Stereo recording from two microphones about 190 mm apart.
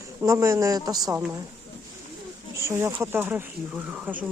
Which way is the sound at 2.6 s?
15° right (ahead or behind).